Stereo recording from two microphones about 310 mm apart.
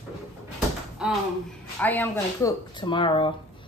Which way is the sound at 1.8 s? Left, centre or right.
Centre.